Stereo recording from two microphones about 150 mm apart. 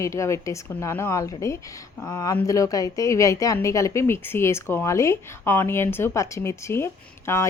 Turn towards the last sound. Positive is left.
turn(degrees=15)  # may be behind; listen again after turning